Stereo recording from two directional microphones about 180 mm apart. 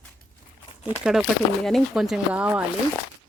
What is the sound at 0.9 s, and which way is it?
Speech, 5° right (ahead or behind).